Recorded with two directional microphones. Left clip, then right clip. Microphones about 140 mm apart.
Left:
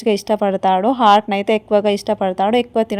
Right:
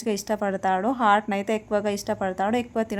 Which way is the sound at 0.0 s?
20° left (ahead or behind).